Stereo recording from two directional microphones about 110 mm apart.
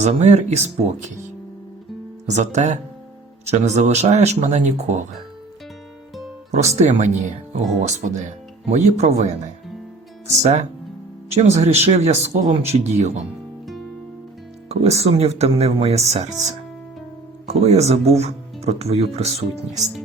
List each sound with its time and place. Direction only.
0.0 s speech: 90° right
2.2 s speech: 90° right
6.5 s speech: 85° right
14.7 s speech: 75° right (ahead or behind)